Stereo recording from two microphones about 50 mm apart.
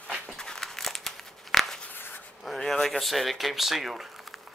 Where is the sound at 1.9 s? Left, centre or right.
Left.